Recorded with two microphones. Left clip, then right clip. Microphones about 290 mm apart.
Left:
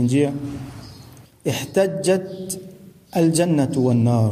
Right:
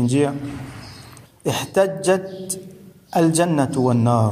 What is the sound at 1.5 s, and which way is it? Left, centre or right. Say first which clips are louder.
A man's voice: right 1 dB; centre.